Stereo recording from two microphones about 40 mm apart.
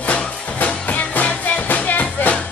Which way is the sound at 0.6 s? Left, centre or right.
Left.